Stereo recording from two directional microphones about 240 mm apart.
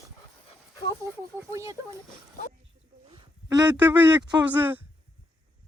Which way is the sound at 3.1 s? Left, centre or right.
Centre.